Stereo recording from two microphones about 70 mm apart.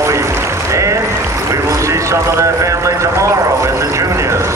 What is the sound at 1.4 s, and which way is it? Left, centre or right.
Speech, right.